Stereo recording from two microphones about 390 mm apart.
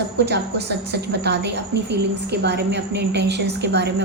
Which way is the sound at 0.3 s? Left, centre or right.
Right.